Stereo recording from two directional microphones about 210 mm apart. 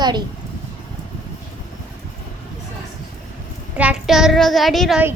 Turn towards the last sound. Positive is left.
turn(degrees=-5)  # may be behind; listen again after turning